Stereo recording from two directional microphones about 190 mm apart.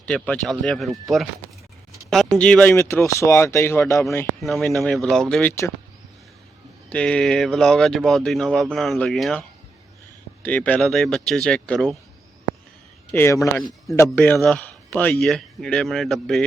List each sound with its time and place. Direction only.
0.0 s speech: 5° left (ahead or behind)
4.4 s speech: centre (ahead or behind)
6.9 s speech: 5° left (ahead or behind)
13.1 s speech: 15° left (ahead or behind)
14.3 s speech: centre (ahead or behind)